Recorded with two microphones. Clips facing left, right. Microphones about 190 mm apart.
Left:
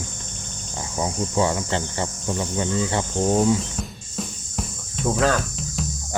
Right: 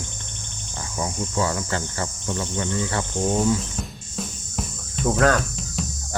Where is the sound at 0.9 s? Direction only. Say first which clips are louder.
Left 3 dB; 25° left (ahead or behind).